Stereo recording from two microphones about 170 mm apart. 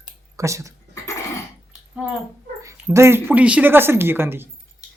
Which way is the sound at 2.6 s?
15° right (ahead or behind).